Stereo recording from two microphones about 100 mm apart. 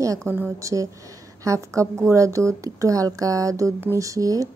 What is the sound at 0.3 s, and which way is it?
A woman's voice, 30° right (ahead or behind).